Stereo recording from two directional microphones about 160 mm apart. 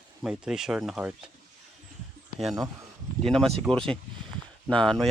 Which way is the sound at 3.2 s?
5° left (ahead or behind).